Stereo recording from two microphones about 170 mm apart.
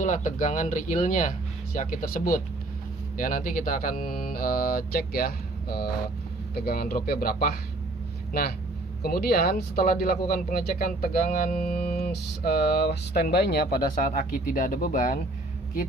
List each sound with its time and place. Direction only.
0.0 s speech: 50° left (ahead or behind)